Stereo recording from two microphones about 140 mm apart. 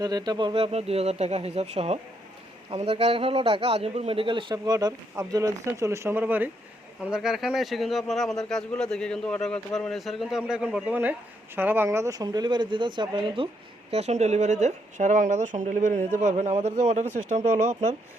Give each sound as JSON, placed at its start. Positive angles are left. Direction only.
{"t": 0.0, "sound": "a man's voice", "side_deg": -30}
{"t": 13.9, "sound": "speech", "side_deg": -50}